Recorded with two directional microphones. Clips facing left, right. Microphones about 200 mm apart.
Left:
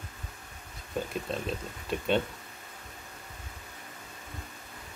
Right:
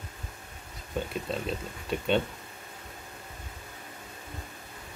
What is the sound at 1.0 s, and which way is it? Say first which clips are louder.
Speech: right 1 dB; 5° left (ahead or behind).